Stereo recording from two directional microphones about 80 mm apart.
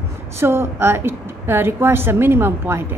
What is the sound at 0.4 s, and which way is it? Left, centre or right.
A woman's voice, right.